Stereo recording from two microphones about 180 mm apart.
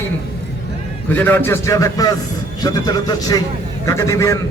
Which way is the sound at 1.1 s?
10° left (ahead or behind).